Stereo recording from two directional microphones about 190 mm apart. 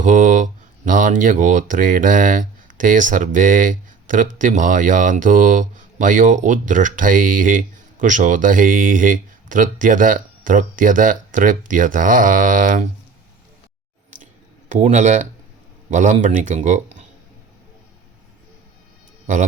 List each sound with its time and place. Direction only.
0.0 s speech: 40° right (ahead or behind)
14.7 s speech: 40° right (ahead or behind)